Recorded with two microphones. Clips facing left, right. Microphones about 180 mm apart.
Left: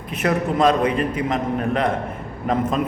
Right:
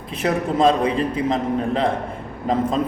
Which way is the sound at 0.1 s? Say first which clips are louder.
Even; 30° right (ahead or behind).